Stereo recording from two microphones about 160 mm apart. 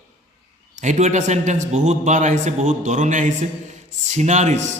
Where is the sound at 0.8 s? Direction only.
50° right (ahead or behind).